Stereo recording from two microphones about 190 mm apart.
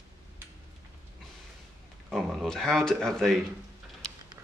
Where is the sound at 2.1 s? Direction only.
Centre (ahead or behind).